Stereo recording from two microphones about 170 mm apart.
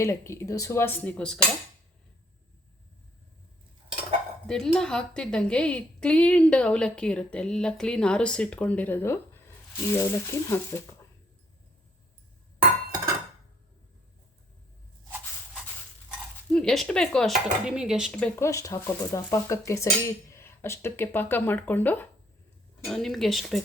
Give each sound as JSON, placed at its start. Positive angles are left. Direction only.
{"t": 0.0, "sound": "speech", "side_deg": 15}
{"t": 4.4, "sound": "a woman's voice", "side_deg": 5}
{"t": 16.5, "sound": "a woman's voice", "side_deg": 5}